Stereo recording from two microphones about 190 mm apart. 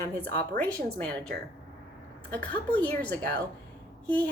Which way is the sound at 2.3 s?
10° left (ahead or behind).